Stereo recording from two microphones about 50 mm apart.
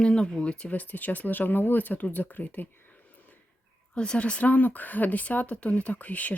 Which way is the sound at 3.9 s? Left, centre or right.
Left.